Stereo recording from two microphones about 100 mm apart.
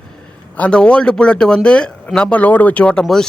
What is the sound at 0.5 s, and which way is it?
Speech, 10° left (ahead or behind).